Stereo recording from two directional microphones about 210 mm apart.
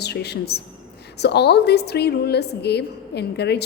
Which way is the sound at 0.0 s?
50° left (ahead or behind).